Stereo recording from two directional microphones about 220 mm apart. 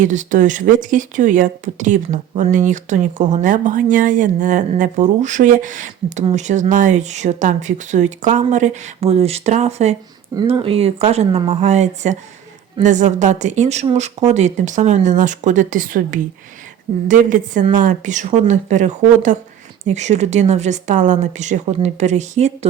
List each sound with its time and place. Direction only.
0.0 s speech: 35° right (ahead or behind)